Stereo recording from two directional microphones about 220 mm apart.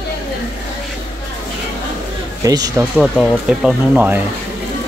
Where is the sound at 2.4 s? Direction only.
15° right (ahead or behind).